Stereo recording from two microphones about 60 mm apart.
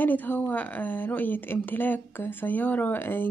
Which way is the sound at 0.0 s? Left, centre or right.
Left.